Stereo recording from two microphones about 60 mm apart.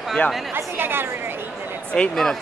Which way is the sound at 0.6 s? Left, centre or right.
Right.